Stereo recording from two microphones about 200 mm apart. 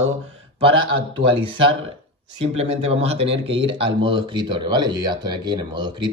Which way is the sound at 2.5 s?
30° right (ahead or behind).